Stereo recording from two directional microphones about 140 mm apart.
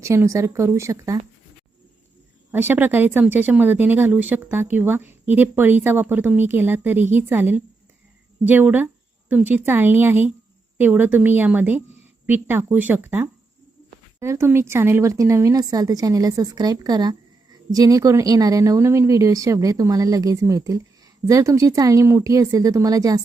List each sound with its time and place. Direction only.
0.0 s a woman's voice: 20° right (ahead or behind)
2.5 s a woman's voice: 15° right (ahead or behind)